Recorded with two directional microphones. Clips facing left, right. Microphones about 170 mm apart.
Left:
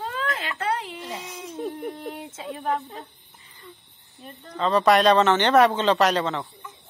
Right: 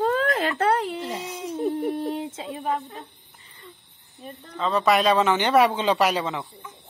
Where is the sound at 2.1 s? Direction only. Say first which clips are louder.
Right 5 dB; 25° right (ahead or behind).